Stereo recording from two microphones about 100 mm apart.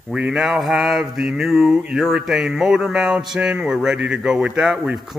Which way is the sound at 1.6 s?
5° right (ahead or behind).